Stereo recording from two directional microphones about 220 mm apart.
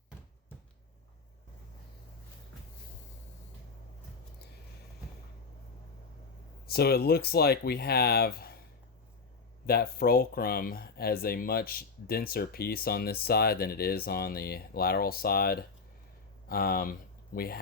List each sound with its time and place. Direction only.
6.7 s speech: 45° left (ahead or behind)
9.6 s speech: 45° left (ahead or behind)